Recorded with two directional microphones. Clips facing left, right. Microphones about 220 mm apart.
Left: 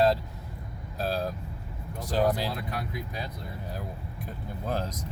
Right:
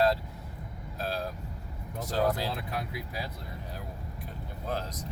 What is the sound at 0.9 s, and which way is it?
Vehicle, 35° left (ahead or behind).